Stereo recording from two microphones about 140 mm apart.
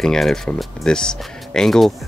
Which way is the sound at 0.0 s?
5° left (ahead or behind).